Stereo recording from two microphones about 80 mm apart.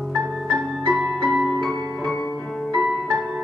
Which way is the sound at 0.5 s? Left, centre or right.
Centre.